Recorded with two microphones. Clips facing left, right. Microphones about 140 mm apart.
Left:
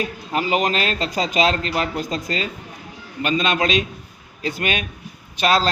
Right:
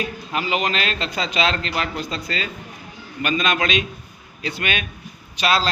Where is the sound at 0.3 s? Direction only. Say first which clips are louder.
Left 3 dB; 40° left (ahead or behind).